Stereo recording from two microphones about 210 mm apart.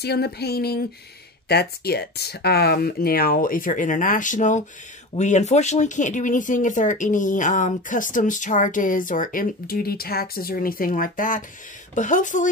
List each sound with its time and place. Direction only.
0.0 s speech: 50° left (ahead or behind)